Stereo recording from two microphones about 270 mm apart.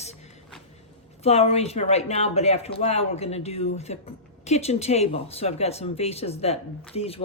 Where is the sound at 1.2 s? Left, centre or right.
Left.